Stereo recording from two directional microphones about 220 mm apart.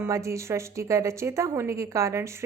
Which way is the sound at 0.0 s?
15° right (ahead or behind).